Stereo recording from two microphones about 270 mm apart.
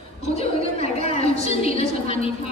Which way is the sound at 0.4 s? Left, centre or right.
Left.